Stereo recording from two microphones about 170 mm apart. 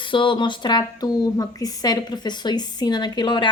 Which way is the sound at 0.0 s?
30° left (ahead or behind).